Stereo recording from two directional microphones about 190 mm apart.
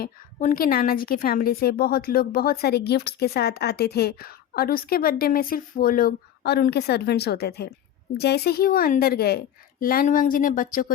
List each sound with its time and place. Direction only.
0.0 s a woman's voice: 45° left (ahead or behind)